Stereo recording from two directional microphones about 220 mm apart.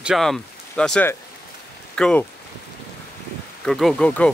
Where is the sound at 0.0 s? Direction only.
Centre (ahead or behind).